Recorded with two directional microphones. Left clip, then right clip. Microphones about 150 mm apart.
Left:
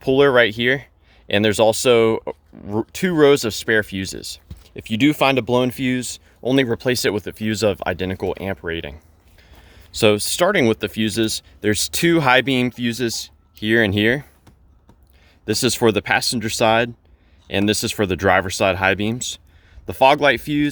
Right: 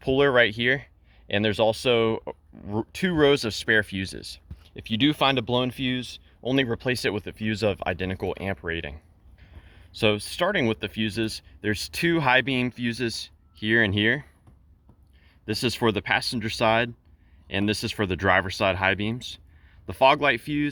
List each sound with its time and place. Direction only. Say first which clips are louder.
0.0 s speech: left 6 dB; 25° left (ahead or behind)
1.3 s speech: left 7 dB; 30° left (ahead or behind)
4.6 s speech: left 5 dB; 30° left (ahead or behind)
9.4 s speech: left 6 dB; 40° left (ahead or behind)
15.4 s speech: left 7 dB; 35° left (ahead or behind)